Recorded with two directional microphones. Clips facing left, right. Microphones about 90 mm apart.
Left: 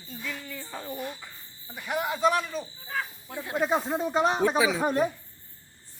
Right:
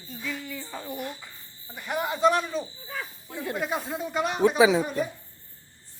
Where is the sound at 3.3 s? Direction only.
25° left (ahead or behind).